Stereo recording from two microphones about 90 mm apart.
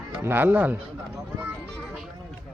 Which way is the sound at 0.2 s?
25° right (ahead or behind).